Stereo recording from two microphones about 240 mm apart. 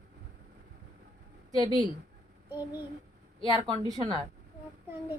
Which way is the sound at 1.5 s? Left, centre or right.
Centre.